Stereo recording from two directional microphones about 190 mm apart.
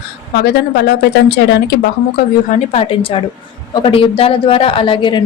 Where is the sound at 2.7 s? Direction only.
30° left (ahead or behind).